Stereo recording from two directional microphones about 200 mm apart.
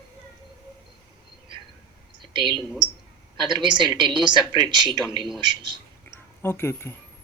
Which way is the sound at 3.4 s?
20° right (ahead or behind).